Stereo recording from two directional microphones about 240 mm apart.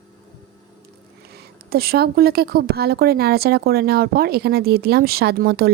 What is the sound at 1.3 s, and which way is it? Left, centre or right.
Speech, right.